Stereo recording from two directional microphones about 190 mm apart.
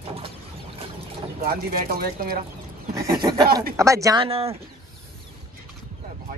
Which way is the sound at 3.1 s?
20° right (ahead or behind).